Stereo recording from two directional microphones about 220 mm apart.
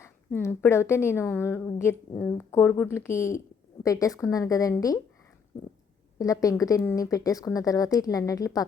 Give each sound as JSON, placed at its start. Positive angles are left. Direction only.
{"t": 0.0, "sound": "a woman's voice", "side_deg": 10}
{"t": 6.1, "sound": "a woman's voice", "side_deg": 15}